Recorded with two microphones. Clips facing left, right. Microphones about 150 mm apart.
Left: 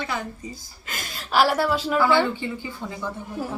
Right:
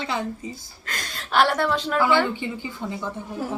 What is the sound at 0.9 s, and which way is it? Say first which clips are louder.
Speech: even; 5° left (ahead or behind).